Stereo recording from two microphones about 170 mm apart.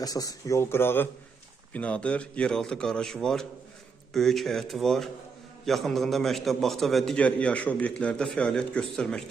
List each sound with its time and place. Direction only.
0.0 s a man's voice: 20° left (ahead or behind); by 9.2 s 5° left (ahead or behind)